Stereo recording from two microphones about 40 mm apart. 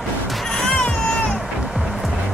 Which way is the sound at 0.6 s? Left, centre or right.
Centre.